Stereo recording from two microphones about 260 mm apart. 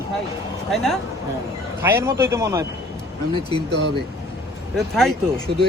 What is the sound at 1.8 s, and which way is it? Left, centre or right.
Speech, centre.